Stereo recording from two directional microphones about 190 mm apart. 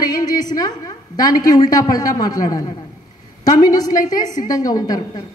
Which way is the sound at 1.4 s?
20° left (ahead or behind).